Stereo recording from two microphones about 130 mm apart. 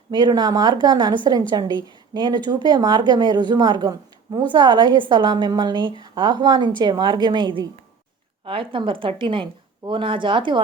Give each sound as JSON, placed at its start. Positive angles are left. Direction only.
{"t": 0.1, "sound": "speech", "side_deg": -35}